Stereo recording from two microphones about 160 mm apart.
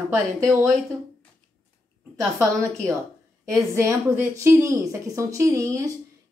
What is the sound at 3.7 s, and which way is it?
A woman's voice, 20° right (ahead or behind).